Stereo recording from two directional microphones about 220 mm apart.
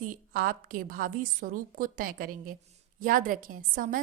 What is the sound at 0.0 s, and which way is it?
A woman's voice, 40° right (ahead or behind).